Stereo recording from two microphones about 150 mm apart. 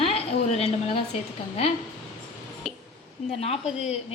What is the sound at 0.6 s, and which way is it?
Speech, 40° left (ahead or behind).